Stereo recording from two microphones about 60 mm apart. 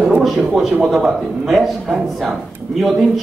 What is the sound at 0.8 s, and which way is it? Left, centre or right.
Speech, centre.